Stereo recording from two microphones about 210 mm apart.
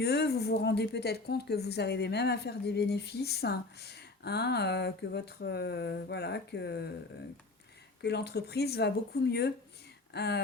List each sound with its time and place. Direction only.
0.0 s speech: 50° left (ahead or behind)
8.0 s speech: 50° left (ahead or behind)